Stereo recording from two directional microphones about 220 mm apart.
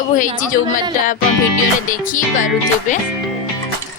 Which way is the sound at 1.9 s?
35° left (ahead or behind).